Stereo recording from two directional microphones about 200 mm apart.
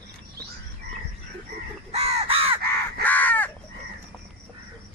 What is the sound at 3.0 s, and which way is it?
Crow, 10° left (ahead or behind).